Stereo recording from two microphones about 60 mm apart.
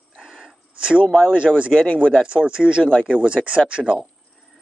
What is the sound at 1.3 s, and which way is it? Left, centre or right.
Speech, centre.